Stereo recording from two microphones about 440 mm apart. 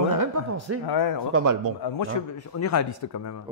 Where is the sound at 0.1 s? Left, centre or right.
Right.